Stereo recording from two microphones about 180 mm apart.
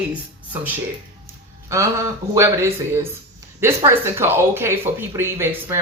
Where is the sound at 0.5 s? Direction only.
10° right (ahead or behind).